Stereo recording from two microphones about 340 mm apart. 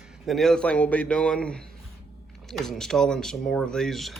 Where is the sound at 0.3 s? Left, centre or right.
Centre.